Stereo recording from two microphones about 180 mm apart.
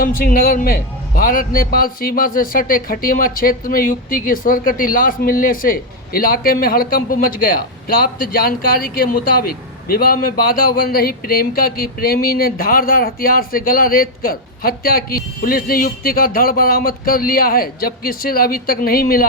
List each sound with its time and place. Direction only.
0.0 s a man's voice: 50° left (ahead or behind)